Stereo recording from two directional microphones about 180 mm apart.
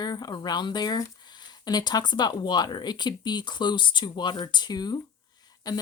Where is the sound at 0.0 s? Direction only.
20° left (ahead or behind).